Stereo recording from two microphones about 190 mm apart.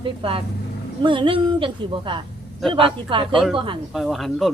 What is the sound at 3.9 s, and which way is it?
Speech, centre (ahead or behind).